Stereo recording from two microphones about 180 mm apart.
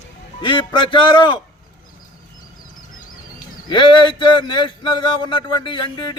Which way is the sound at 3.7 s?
25° left (ahead or behind).